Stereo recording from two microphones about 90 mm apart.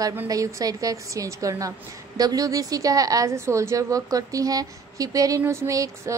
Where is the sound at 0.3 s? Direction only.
40° right (ahead or behind).